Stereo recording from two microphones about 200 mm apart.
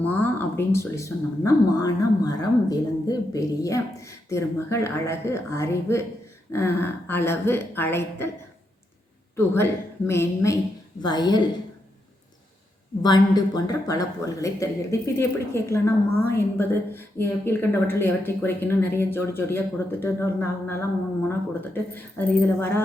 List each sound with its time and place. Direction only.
0.0 s speech: 10° left (ahead or behind)
9.3 s a woman's voice: 10° left (ahead or behind)
13.0 s speech: 20° left (ahead or behind)